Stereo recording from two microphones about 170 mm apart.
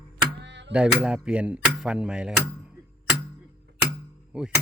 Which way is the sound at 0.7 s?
5° right (ahead or behind).